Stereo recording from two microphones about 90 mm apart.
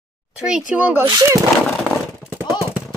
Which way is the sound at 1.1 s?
40° right (ahead or behind).